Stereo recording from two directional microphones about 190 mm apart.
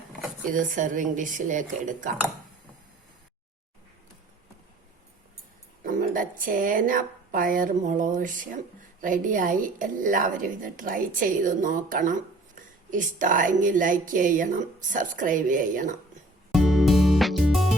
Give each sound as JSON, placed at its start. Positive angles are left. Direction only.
{"t": 0.4, "sound": "speech", "side_deg": -45}
{"t": 5.8, "sound": "speech", "side_deg": -45}
{"t": 16.5, "sound": "music", "side_deg": 0}